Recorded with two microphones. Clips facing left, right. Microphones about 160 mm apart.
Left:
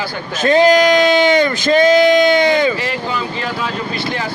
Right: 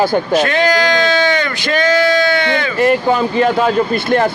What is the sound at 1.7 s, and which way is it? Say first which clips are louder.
Speech: left 3 dB; 15° left (ahead or behind).